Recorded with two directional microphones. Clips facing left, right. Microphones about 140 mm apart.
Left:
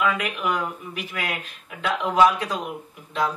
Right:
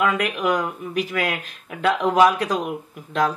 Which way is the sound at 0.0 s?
45° right (ahead or behind).